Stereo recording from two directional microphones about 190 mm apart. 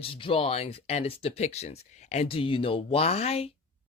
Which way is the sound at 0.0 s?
25° left (ahead or behind).